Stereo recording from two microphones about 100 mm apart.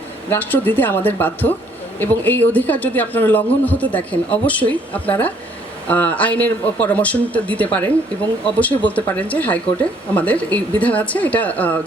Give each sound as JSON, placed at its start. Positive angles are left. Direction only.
{"t": 0.3, "sound": "a woman's voice", "side_deg": 20}